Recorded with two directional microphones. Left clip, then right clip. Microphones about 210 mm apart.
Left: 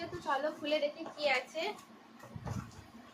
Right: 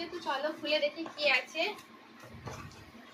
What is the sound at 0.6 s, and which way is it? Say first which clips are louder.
Speech: right 3 dB; 20° left (ahead or behind).